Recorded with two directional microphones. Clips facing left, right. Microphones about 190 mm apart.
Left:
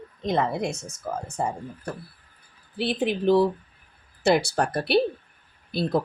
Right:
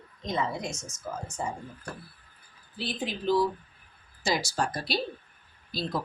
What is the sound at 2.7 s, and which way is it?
Speech, 65° left (ahead or behind).